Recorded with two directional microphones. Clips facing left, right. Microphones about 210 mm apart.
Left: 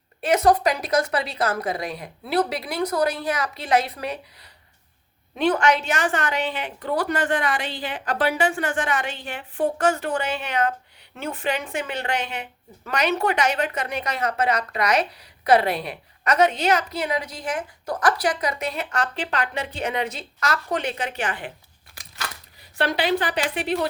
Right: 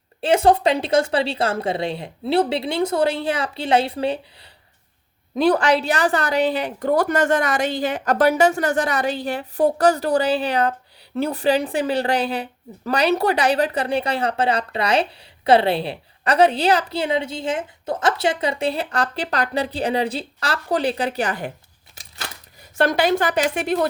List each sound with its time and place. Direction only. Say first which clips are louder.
0.2 s a woman's voice: right 2 dB; 30° right (ahead or behind)
22.8 s a woman's voice: right 4 dB; 45° right (ahead or behind)